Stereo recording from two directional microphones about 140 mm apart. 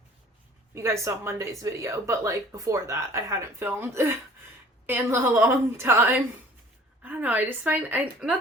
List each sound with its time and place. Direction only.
0.7 s a woman's voice: 20° right (ahead or behind)